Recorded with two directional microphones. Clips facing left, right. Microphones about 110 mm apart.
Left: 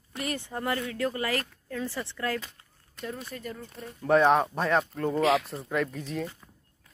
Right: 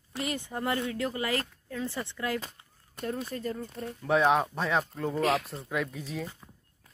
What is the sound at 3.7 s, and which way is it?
Speech, centre (ahead or behind).